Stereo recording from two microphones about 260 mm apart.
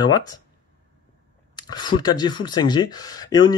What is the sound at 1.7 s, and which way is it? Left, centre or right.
Speech, centre.